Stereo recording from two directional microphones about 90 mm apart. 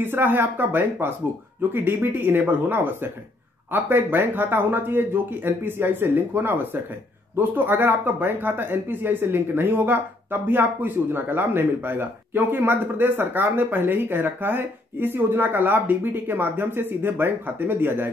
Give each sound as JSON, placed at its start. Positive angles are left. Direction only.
{"t": 0.0, "sound": "speech", "side_deg": -20}